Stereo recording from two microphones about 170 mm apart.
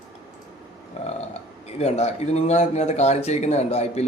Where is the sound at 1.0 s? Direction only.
40° left (ahead or behind).